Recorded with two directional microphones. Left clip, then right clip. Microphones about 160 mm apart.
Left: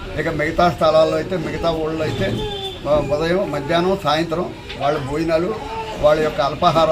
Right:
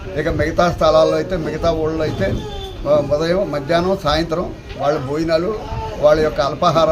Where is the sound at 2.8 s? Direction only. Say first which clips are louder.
Right 2 dB; 25° right (ahead or behind).